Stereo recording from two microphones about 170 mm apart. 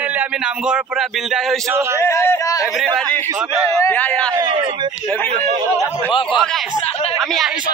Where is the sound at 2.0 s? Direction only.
15° left (ahead or behind).